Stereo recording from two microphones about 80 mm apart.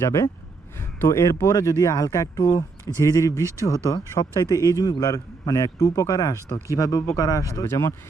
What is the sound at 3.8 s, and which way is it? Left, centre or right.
A man's voice, left.